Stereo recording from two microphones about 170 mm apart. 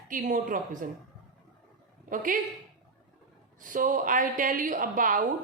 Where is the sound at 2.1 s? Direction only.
50° right (ahead or behind).